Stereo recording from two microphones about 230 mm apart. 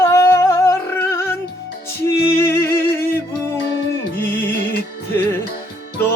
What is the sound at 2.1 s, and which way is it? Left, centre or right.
Music, left.